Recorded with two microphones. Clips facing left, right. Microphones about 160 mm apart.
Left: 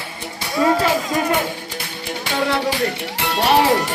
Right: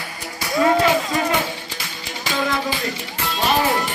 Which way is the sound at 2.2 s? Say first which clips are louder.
Left 2 dB; 70° left (ahead or behind).